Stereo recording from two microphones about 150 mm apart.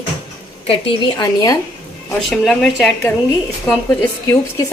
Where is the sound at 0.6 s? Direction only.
40° left (ahead or behind).